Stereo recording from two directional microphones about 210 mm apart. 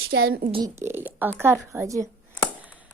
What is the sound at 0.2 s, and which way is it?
Speech, 45° right (ahead or behind).